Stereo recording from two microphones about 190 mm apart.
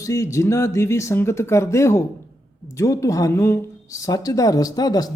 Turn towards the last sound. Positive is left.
turn(degrees=20)  # may be behind; listen again after turning